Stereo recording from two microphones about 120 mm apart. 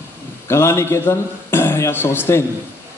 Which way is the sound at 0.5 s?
20° left (ahead or behind).